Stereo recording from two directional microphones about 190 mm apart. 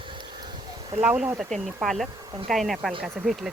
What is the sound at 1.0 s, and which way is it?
Speech, 5° right (ahead or behind).